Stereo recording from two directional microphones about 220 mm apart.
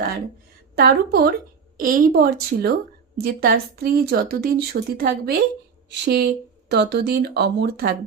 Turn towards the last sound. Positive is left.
turn(degrees=-50)  # may be behind; listen again after turning